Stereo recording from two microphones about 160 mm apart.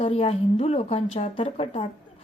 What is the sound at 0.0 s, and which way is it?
Speech, 35° left (ahead or behind).